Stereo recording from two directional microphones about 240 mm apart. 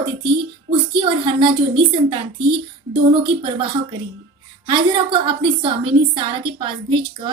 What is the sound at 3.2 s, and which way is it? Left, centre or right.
A woman's voice, right.